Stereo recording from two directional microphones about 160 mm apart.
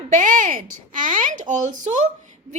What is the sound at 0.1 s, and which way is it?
A child's voice, 55° right (ahead or behind).